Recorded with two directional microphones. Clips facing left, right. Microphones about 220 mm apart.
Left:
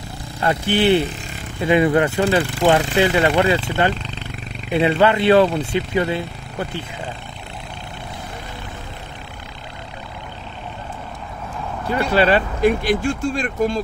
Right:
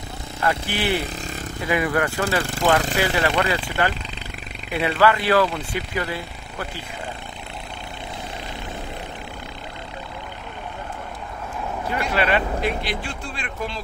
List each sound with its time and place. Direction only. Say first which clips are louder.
0.4 s speech: left 6 dB; 25° left (ahead or behind)
12.0 s speech: left 6 dB; 30° left (ahead or behind)
12.6 s speech: left 9 dB; 45° left (ahead or behind)